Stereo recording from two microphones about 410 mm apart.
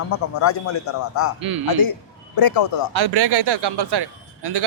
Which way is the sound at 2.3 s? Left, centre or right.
Left.